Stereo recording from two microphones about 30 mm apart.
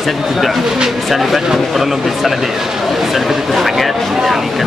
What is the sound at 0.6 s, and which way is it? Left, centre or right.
Speech, right.